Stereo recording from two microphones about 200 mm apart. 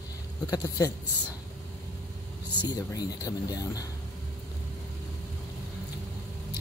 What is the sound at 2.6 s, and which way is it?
Speech, 20° left (ahead or behind).